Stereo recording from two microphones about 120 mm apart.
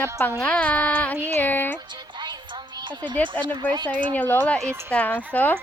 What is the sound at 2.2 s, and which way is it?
Music, 35° right (ahead or behind).